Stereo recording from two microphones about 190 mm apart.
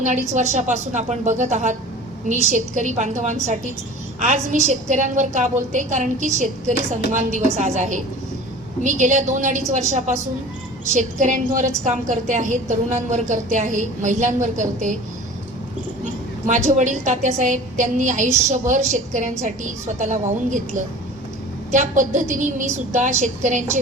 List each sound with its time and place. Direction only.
0.0 s a woman's voice: 40° right (ahead or behind)
16.5 s a woman's voice: 40° right (ahead or behind)